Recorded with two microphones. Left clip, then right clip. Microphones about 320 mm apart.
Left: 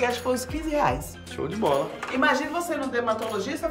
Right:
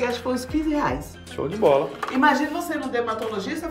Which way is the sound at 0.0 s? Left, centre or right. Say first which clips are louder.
Even; left.